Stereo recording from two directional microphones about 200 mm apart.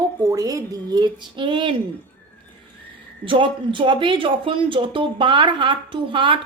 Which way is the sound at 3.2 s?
25° right (ahead or behind).